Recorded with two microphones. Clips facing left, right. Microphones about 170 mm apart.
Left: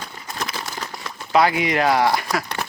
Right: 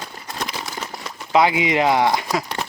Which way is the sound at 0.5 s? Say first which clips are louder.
Right 1 dB; 5° right (ahead or behind).